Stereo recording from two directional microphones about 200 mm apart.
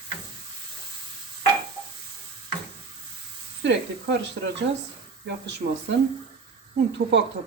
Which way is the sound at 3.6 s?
65° right (ahead or behind).